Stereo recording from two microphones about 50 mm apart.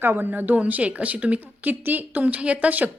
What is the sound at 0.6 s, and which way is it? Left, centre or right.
A woman's voice, right.